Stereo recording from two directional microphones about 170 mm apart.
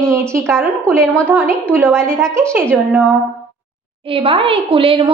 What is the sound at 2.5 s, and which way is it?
Speech, 10° right (ahead or behind).